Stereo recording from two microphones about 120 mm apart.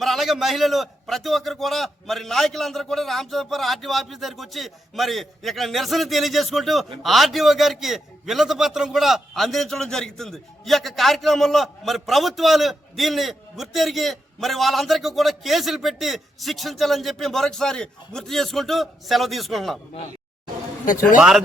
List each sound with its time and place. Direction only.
0.0 s a man's voice: centre (ahead or behind)
20.8 s a man's voice: 90° left
21.2 s a man's voice: 5° right (ahead or behind)